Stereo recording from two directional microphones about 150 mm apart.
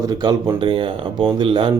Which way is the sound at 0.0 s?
25° right (ahead or behind).